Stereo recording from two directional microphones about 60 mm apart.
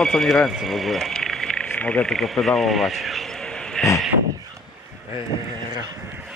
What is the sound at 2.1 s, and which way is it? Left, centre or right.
Speech, centre.